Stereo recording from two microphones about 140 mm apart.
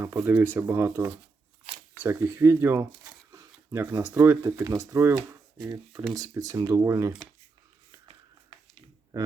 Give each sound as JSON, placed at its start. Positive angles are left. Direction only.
{"t": 0.0, "sound": "speech", "side_deg": -15}
{"t": 5.3, "sound": "shuffling cards", "side_deg": -20}
{"t": 6.1, "sound": "speech", "side_deg": -25}